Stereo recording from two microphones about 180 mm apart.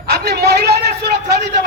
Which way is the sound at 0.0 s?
65° right (ahead or behind).